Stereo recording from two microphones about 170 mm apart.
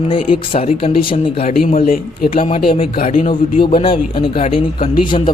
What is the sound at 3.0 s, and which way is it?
Speech, 50° left (ahead or behind).